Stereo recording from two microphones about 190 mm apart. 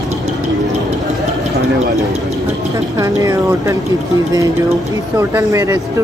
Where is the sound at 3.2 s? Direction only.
15° right (ahead or behind).